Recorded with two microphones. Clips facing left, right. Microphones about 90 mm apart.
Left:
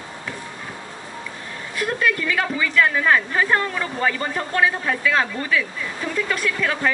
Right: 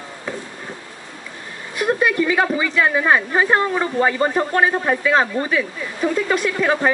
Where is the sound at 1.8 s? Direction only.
20° right (ahead or behind).